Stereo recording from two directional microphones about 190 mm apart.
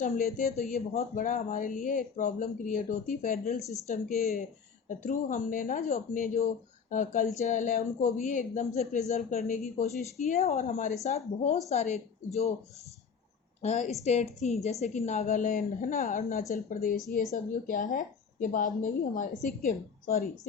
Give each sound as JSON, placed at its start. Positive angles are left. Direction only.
{"t": 0.0, "sound": "speech", "side_deg": 45}
{"t": 0.5, "sound": "speech", "side_deg": 35}
{"t": 13.6, "sound": "speech", "side_deg": 35}